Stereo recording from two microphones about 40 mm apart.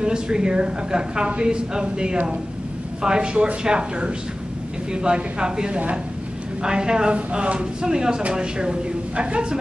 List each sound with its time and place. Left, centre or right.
0.0 s speech: right